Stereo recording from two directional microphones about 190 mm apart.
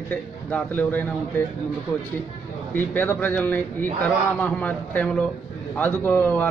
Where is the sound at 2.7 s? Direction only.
10° left (ahead or behind).